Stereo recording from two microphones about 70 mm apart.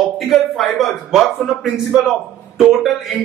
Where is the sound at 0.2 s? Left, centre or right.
Centre.